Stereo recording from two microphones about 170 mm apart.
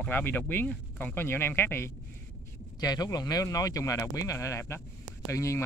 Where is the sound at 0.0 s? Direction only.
10° left (ahead or behind).